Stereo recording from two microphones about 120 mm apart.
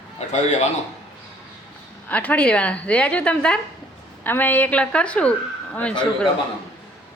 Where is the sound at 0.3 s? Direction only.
75° left (ahead or behind).